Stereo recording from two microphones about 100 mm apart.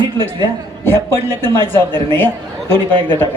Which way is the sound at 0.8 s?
20° left (ahead or behind).